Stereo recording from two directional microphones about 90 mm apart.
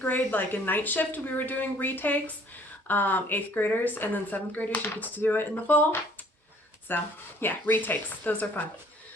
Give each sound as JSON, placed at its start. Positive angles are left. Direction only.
{"t": 0.0, "sound": "speech", "side_deg": 20}